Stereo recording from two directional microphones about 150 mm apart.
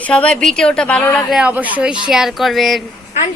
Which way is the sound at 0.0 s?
10° left (ahead or behind).